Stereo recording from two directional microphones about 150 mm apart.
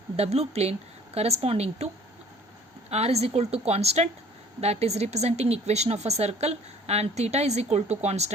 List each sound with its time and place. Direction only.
0.2 s speech: 45° right (ahead or behind)
2.9 s speech: 45° right (ahead or behind)